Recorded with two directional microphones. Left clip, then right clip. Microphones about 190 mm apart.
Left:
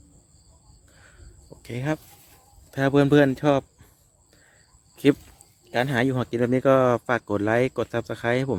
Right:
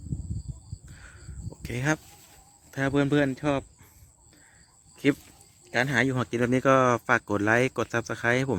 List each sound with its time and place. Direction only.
0.9 s cricket: 5° left (ahead or behind)
1.6 s speech: centre (ahead or behind)
2.6 s a sound: 15° left (ahead or behind)
2.9 s speech: 30° left (ahead or behind)
5.0 s speech: 20° left (ahead or behind)